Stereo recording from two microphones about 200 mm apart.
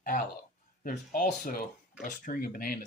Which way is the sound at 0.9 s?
45° left (ahead or behind).